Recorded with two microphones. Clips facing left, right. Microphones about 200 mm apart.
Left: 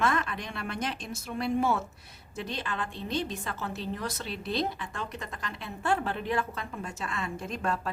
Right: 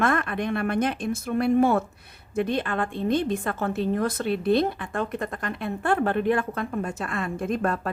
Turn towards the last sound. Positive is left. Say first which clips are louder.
# right 7 dB
turn(degrees=-55)  # may be behind; listen again after turning